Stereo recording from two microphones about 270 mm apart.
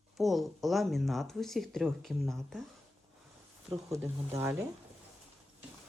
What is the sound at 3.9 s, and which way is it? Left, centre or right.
Speech, centre.